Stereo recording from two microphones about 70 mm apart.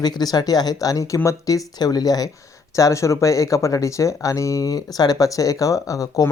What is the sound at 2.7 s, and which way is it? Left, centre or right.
Speech, left.